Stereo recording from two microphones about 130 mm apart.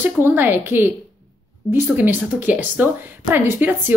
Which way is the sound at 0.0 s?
15° right (ahead or behind).